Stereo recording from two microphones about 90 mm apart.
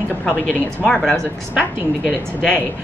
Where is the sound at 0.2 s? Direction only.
10° left (ahead or behind).